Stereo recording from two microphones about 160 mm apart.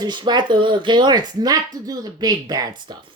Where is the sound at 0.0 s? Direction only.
25° right (ahead or behind).